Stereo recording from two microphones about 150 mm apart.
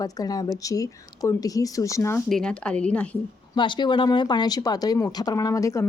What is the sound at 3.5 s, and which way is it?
A woman's voice, 30° left (ahead or behind).